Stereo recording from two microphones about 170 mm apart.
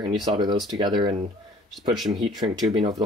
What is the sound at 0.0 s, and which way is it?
Speech, 25° right (ahead or behind).